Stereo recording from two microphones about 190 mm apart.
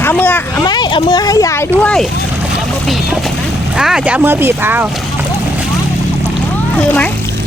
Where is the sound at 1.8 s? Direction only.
5° left (ahead or behind).